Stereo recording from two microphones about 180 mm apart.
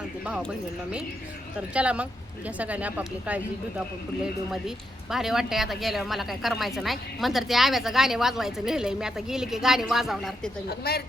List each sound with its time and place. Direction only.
0.3 s a woman's voice: 5° right (ahead or behind)
1.7 s speech: 5° right (ahead or behind)
5.1 s a woman's voice: centre (ahead or behind)
10.7 s speech: 60° left (ahead or behind)